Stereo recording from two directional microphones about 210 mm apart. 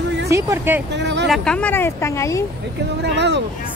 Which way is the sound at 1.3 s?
5° left (ahead or behind).